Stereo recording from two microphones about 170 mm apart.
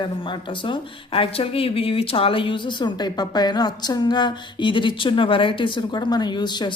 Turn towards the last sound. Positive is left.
turn(degrees=25)  # may be behind; listen again after turning